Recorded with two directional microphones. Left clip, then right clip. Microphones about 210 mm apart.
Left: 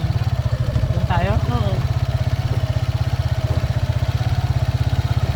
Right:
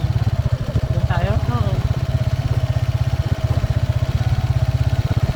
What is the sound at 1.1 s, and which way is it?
Vehicle, 40° left (ahead or behind).